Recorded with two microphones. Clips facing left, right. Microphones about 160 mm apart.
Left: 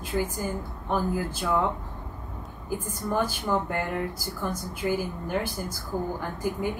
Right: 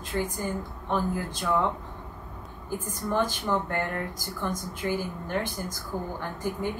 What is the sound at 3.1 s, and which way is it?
Speech, 10° left (ahead or behind).